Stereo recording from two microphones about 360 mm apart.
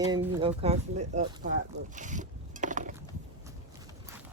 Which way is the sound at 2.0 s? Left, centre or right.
Right.